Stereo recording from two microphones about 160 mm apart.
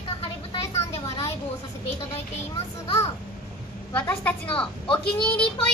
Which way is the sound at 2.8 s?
40° left (ahead or behind).